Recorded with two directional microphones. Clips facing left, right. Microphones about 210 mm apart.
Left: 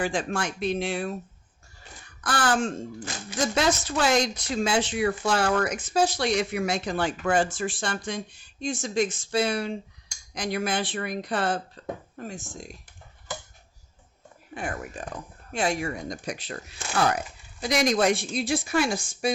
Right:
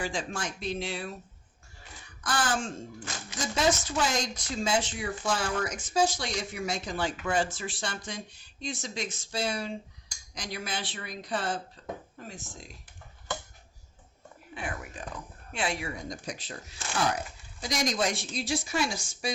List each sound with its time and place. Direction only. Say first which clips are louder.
0.0 s speech: left 6 dB; 55° left (ahead or behind)
2.2 s speech: left 5 dB; 60° left (ahead or behind)
12.1 s speech: left 6 dB; 50° left (ahead or behind)
14.5 s speech: left 5 dB; 45° left (ahead or behind)
16.0 s speech: left 4 dB; 65° left (ahead or behind)